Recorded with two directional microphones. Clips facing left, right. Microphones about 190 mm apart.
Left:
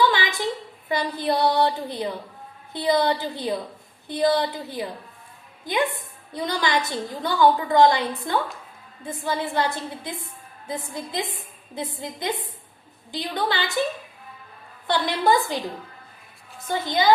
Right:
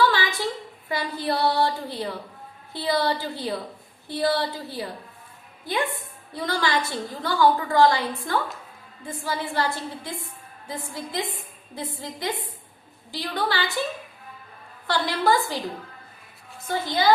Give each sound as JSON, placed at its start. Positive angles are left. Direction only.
{"t": 0.0, "sound": "a sound", "side_deg": 20}
{"t": 0.9, "sound": "a woman's voice", "side_deg": 20}
{"t": 14.8, "sound": "a woman's voice", "side_deg": 20}
{"t": 16.8, "sound": "a woman's voice", "side_deg": 20}